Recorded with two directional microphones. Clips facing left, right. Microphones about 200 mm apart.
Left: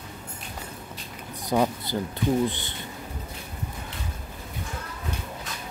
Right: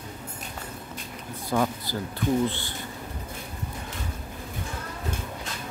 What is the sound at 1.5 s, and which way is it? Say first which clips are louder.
Speech: left 2 dB; 15° left (ahead or behind).